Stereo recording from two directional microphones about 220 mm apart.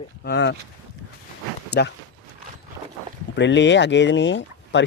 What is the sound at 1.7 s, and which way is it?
Speech, 50° left (ahead or behind).